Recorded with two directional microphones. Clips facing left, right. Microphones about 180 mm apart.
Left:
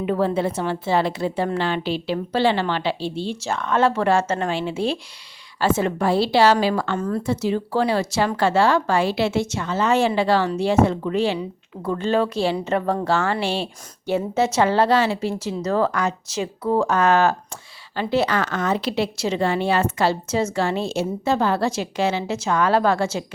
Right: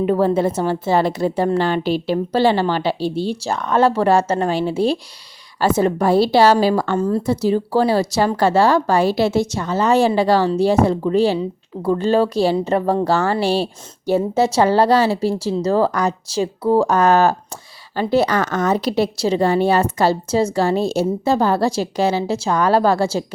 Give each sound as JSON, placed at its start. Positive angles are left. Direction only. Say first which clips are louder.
{"t": 0.0, "sound": "a woman's voice", "louder": "right 5 dB", "side_deg": -40}